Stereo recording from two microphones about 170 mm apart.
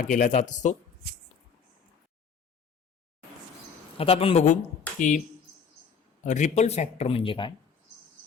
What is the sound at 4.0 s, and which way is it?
Speech, 35° left (ahead or behind).